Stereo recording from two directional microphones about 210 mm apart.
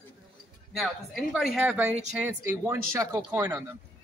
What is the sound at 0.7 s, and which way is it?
Speech, centre (ahead or behind).